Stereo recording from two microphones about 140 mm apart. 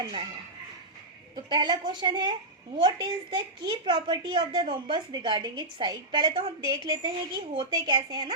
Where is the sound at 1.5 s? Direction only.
30° right (ahead or behind).